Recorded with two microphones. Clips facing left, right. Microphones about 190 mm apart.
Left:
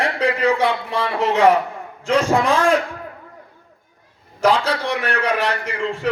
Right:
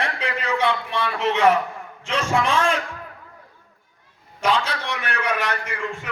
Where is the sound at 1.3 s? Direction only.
65° left (ahead or behind).